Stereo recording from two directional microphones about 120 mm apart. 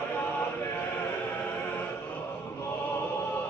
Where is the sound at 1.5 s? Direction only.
15° left (ahead or behind).